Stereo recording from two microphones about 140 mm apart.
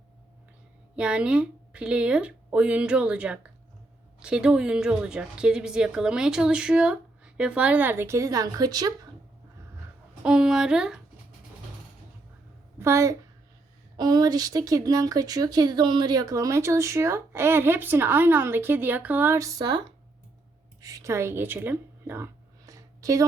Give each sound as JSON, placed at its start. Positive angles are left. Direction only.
{"t": 0.9, "sound": "a woman's voice", "side_deg": -10}
{"t": 10.2, "sound": "speech", "side_deg": -5}
{"t": 12.8, "sound": "speech", "side_deg": -20}
{"t": 20.8, "sound": "a woman's voice", "side_deg": -25}